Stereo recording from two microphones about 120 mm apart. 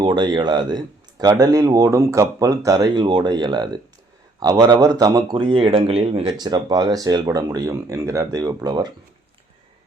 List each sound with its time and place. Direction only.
0.0 s a man's voice: 40° right (ahead or behind)
6.4 s a man's voice: 35° right (ahead or behind)